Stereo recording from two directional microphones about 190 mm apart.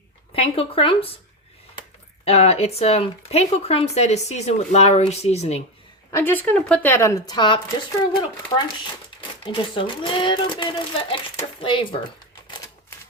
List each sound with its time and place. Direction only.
0.3 s speech: 30° left (ahead or behind)
2.2 s speech: 35° left (ahead or behind)
6.1 s speech: 10° left (ahead or behind)